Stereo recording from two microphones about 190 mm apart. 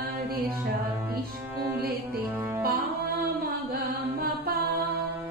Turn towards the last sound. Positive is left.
turn(degrees=-55)  # may be behind; listen again after turning